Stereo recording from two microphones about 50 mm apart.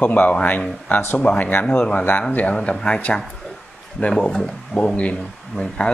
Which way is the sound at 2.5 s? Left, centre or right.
Centre.